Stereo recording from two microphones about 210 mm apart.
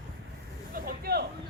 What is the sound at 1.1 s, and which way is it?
Music, 45° right (ahead or behind).